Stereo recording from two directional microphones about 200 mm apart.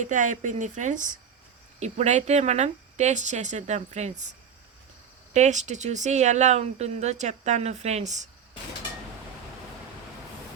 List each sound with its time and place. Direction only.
0.0 s speech: 40° right (ahead or behind)